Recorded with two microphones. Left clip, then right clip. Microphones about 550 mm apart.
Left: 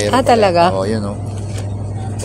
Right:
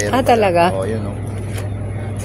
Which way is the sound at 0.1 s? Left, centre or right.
Right.